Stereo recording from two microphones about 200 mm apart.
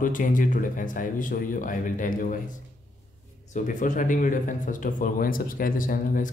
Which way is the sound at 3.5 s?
40° left (ahead or behind).